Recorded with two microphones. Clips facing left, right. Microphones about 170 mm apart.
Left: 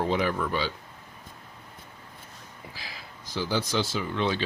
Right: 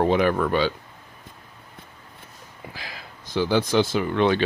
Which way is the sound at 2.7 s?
60° right (ahead or behind).